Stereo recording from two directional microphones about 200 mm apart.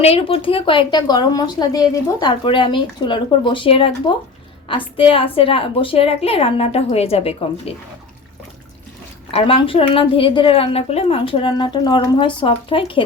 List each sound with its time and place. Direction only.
0.0 s a woman's voice: 30° left (ahead or behind)
9.3 s a woman's voice: 30° left (ahead or behind)